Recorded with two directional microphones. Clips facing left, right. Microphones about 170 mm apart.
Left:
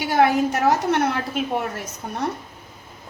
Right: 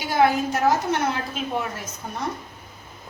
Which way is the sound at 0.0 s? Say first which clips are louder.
Left 2 dB; 65° left (ahead or behind).